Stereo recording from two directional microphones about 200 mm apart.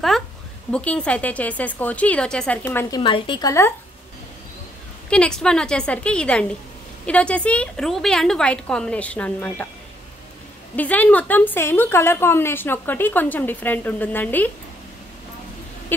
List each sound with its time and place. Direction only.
0.7 s a woman's voice: 5° left (ahead or behind)
3.0 s speech: 25° left (ahead or behind)
5.1 s a woman's voice: 5° left (ahead or behind)
10.8 s a woman's voice: 10° left (ahead or behind)